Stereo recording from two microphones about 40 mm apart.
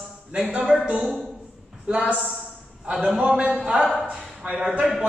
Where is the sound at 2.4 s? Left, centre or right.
Right.